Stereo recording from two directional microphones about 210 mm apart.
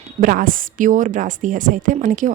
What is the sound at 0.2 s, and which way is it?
Speech, 40° right (ahead or behind).